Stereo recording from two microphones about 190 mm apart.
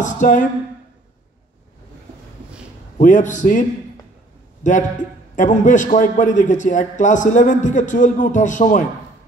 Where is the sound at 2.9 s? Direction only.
40° left (ahead or behind).